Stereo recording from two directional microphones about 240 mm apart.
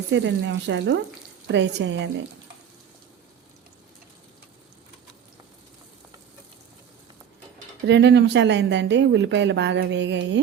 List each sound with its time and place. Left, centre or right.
0.1 s speech: right
7.9 s speech: right